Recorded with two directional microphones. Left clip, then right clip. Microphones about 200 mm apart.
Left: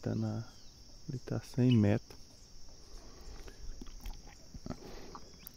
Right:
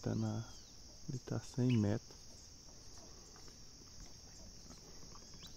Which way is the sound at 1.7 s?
50° left (ahead or behind).